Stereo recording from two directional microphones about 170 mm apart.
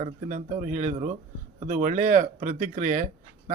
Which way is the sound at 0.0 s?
45° right (ahead or behind).